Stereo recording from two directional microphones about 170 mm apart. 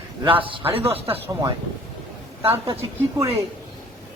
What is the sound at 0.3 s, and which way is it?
Speech, 30° right (ahead or behind).